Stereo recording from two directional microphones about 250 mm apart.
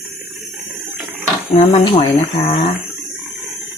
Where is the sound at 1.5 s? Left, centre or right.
Left.